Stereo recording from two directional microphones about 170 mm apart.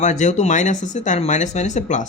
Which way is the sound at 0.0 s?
45° left (ahead or behind).